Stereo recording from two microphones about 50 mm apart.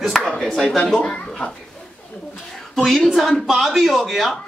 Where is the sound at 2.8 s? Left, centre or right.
Centre.